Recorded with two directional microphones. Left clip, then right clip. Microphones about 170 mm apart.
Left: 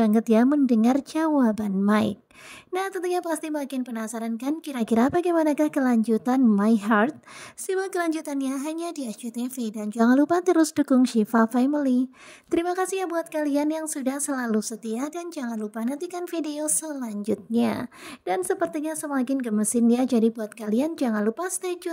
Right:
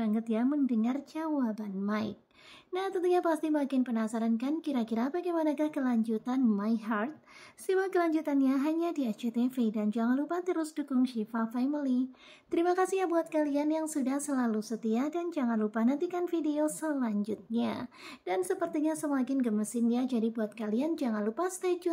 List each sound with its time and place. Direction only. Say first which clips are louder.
0.0 s speech: left 11 dB; 45° left (ahead or behind)